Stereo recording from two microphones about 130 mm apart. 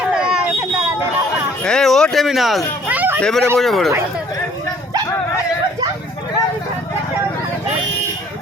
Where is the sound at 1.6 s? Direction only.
5° left (ahead or behind).